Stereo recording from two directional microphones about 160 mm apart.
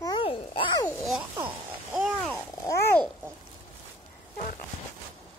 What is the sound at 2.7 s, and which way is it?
Babbling, 15° left (ahead or behind).